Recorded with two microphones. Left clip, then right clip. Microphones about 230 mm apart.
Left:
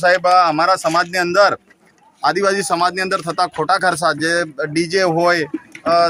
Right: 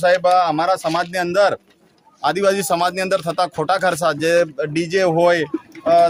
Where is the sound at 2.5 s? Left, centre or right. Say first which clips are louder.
Left 2 dB; right.